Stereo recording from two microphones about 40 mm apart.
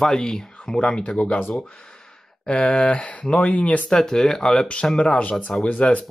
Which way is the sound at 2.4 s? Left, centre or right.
Left.